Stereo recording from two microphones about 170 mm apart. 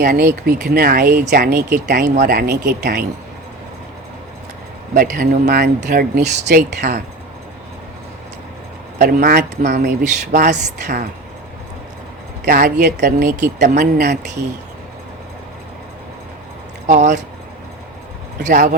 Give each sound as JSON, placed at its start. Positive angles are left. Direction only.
{"t": 0.0, "sound": "speech", "side_deg": -55}
{"t": 2.0, "sound": "speech", "side_deg": -50}
{"t": 4.9, "sound": "speech", "side_deg": -55}
{"t": 6.8, "sound": "speech", "side_deg": -45}
{"t": 9.0, "sound": "speech", "side_deg": -65}
{"t": 10.3, "sound": "speech", "side_deg": -45}
{"t": 10.6, "sound": "speech", "side_deg": -80}
{"t": 12.5, "sound": "speech", "side_deg": -60}
{"t": 13.6, "sound": "speech", "side_deg": -80}
{"t": 16.8, "sound": "speech", "side_deg": -45}
{"t": 18.4, "sound": "speech", "side_deg": -50}